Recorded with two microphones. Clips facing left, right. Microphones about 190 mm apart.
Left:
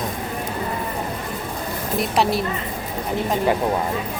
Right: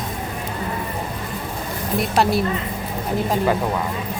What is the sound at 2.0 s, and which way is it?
Speech, centre (ahead or behind).